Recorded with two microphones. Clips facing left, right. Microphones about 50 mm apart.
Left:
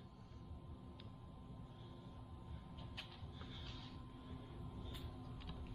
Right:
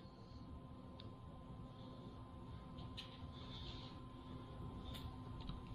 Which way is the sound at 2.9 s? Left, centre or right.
Left.